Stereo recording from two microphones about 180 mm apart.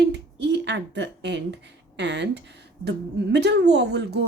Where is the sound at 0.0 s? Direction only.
70° right (ahead or behind).